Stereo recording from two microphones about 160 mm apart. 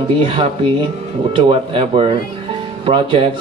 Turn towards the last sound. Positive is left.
turn(degrees=-35)  # may be behind; listen again after turning